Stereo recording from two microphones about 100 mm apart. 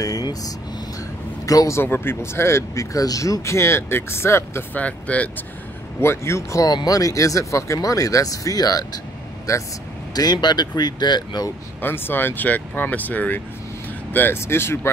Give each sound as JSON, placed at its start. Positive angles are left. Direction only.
{"t": 0.0, "sound": "speech", "side_deg": 40}
{"t": 1.8, "sound": "speech", "side_deg": 25}
{"t": 4.7, "sound": "speech", "side_deg": 15}
{"t": 5.9, "sound": "speech", "side_deg": 25}
{"t": 10.1, "sound": "speech", "side_deg": 45}
{"t": 11.8, "sound": "speech", "side_deg": 20}